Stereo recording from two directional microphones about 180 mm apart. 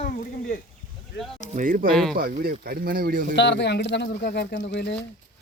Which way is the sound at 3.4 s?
75° left (ahead or behind).